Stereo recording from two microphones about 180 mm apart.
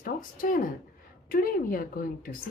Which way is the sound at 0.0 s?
50° left (ahead or behind).